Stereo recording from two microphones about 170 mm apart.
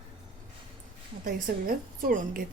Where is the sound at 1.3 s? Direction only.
55° right (ahead or behind).